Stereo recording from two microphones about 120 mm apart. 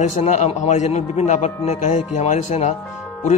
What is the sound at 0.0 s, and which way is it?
A man's voice, 75° left (ahead or behind).